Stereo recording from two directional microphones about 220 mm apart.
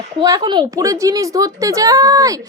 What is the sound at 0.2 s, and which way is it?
A woman's voice, 20° right (ahead or behind).